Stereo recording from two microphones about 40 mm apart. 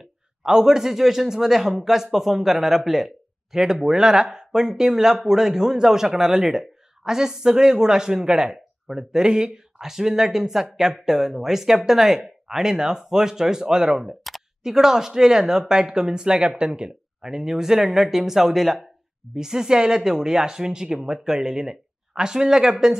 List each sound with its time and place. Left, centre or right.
0.4 s speech: centre